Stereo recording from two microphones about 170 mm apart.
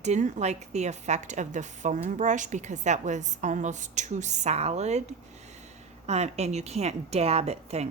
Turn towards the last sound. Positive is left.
turn(degrees=-40)  # may be behind; listen again after turning